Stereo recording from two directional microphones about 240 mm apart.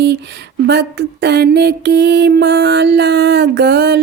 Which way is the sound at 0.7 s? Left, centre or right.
Right.